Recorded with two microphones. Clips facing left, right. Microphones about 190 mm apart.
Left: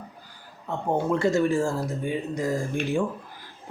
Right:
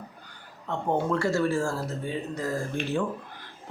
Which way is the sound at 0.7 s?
15° left (ahead or behind).